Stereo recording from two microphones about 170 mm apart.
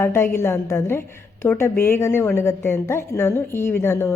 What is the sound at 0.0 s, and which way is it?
A woman's voice, 15° left (ahead or behind).